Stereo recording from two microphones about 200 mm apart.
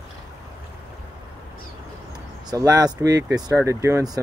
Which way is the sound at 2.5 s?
15° right (ahead or behind).